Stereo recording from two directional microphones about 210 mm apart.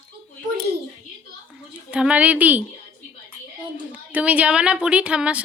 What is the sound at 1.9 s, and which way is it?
Speech, 5° right (ahead or behind).